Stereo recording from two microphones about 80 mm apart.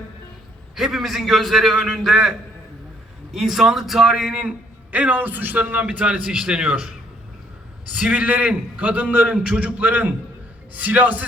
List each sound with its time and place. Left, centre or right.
0.8 s a man's voice: centre
3.3 s a man's voice: centre
7.9 s a man's voice: centre